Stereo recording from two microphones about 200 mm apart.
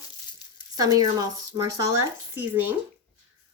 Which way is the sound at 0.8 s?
20° right (ahead or behind).